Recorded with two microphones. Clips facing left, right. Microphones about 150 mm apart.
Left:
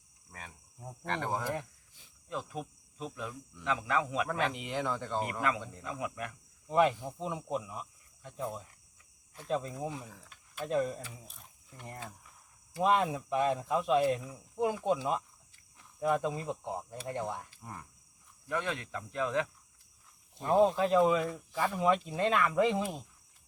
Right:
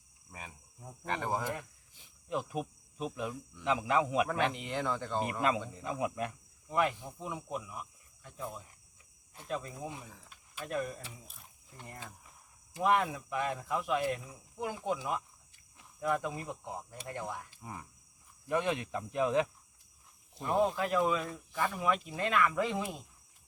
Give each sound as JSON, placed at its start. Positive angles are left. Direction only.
{"t": 0.3, "sound": "cricket", "side_deg": -5}
{"t": 1.0, "sound": "speech", "side_deg": -5}
{"t": 2.3, "sound": "cricket", "side_deg": -15}
{"t": 3.6, "sound": "speech", "side_deg": -20}
{"t": 4.3, "sound": "speech", "side_deg": 0}
{"t": 5.2, "sound": "speech", "side_deg": -20}
{"t": 5.5, "sound": "speech", "side_deg": 0}
{"t": 5.8, "sound": "speech", "side_deg": -25}
{"t": 6.7, "sound": "speech", "side_deg": 25}
{"t": 10.1, "sound": "a sound", "side_deg": 0}
{"t": 10.6, "sound": "speech", "side_deg": 25}
{"t": 17.6, "sound": "cricket", "side_deg": -5}
{"t": 18.4, "sound": "speech", "side_deg": -20}
{"t": 20.4, "sound": "speech", "side_deg": 30}